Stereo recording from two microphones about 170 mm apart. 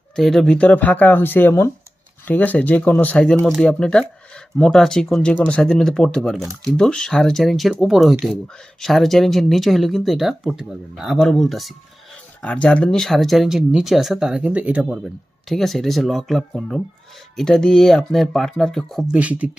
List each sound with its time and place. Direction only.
0.2 s speech: centre (ahead or behind)